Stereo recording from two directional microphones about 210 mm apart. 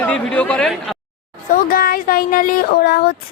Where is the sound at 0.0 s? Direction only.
5° left (ahead or behind).